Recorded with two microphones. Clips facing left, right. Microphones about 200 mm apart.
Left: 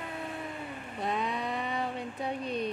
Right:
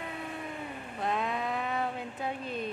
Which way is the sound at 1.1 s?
Centre (ahead or behind).